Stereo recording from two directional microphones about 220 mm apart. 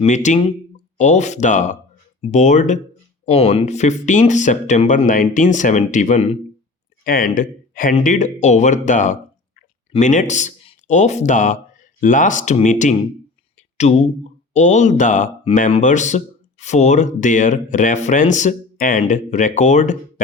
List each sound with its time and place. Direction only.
0.0 s speech: 35° left (ahead or behind)